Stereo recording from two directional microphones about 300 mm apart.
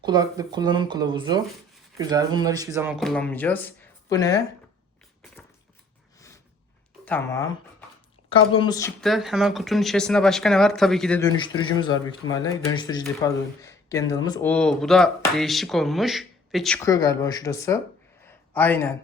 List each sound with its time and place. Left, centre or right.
0.0 s speech: centre
6.1 s snort: centre
7.0 s speech: centre
18.3 s a sound: centre